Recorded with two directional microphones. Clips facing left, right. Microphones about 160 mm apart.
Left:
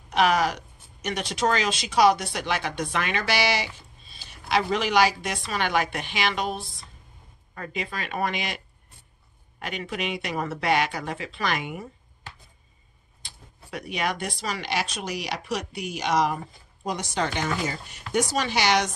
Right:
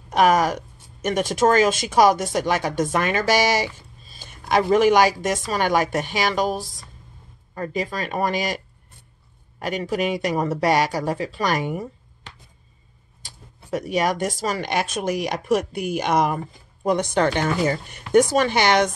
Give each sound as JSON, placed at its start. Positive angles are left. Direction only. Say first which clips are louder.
{"t": 0.1, "sound": "speech", "louder": "right 4 dB", "side_deg": -45}
{"t": 13.2, "sound": "speech", "louder": "right 2 dB", "side_deg": -40}